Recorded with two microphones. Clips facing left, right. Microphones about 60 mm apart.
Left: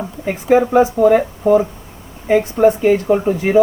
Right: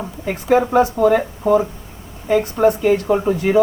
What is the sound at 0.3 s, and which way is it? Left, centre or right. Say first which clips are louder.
Speech: left 2 dB; centre.